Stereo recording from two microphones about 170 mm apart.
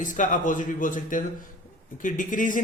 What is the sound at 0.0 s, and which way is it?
Speech, 50° left (ahead or behind).